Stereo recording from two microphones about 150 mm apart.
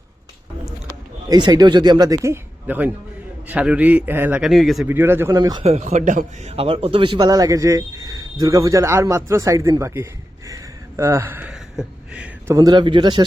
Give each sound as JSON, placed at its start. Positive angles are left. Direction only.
{"t": 1.3, "sound": "a man's voice", "side_deg": -30}
{"t": 4.9, "sound": "a man's voice", "side_deg": -15}
{"t": 5.6, "sound": "a man's voice", "side_deg": -45}
{"t": 11.5, "sound": "a sound", "side_deg": -5}
{"t": 12.5, "sound": "a man's voice", "side_deg": -30}